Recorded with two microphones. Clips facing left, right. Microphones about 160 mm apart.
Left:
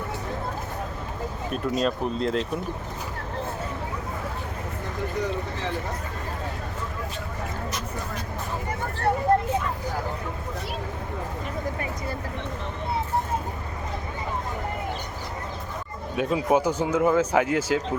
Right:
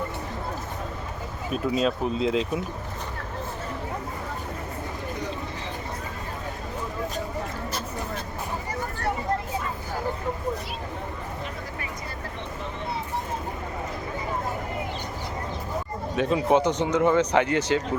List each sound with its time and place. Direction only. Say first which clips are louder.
1.5 s speech: right 1 dB; centre (ahead or behind)
9.3 s vehicle: left 9 dB; 55° left (ahead or behind)
16.1 s speech: right 1 dB; 5° left (ahead or behind)